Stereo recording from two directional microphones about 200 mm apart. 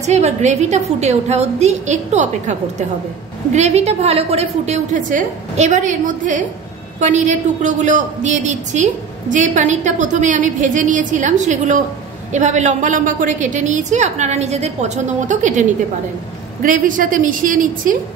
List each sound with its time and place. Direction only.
0.0 s a woman's voice: 35° right (ahead or behind)
3.5 s a woman's voice: 35° right (ahead or behind)
16.6 s a woman's voice: 40° right (ahead or behind)